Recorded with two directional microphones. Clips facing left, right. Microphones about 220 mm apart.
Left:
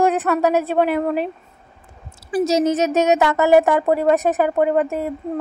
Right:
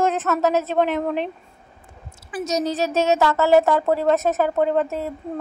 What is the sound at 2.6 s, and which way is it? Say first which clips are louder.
A woman's voice: left 4 dB; 20° left (ahead or behind).